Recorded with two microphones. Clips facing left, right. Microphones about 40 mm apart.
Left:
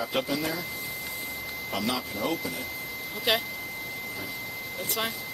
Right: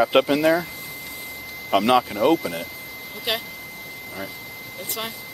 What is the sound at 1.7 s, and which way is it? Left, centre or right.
Speech, right.